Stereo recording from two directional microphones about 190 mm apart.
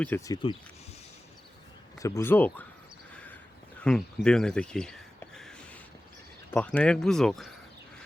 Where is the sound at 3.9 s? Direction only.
5° left (ahead or behind).